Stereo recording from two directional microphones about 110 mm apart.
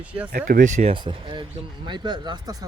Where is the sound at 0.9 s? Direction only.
50° right (ahead or behind).